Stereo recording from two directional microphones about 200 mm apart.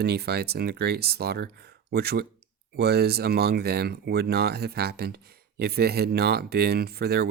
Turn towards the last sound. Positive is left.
turn(degrees=-50)  # may be behind; listen again after turning